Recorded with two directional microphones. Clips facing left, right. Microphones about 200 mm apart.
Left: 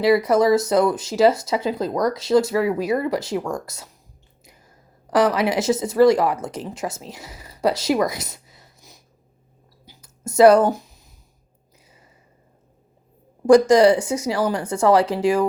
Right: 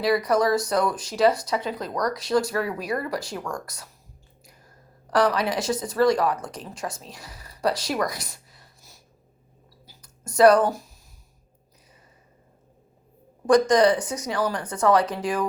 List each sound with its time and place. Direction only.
0.0 s speech: 25° left (ahead or behind)
5.1 s speech: 20° left (ahead or behind)
9.8 s a sound: 20° left (ahead or behind)
13.5 s speech: 25° left (ahead or behind)